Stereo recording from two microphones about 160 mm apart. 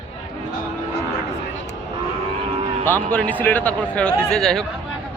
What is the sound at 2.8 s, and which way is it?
A man's voice, 10° left (ahead or behind).